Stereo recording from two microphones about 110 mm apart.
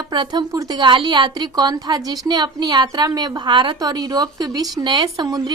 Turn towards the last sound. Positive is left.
turn(degrees=-35)  # may be behind; listen again after turning